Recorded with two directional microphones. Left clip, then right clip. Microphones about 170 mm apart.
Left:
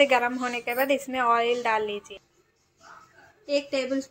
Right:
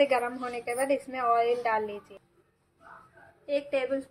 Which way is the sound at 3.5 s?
55° left (ahead or behind).